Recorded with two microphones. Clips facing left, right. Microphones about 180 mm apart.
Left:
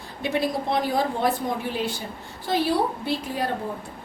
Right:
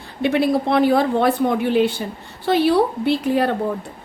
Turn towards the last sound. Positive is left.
turn(degrees=-65)  # may be behind; listen again after turning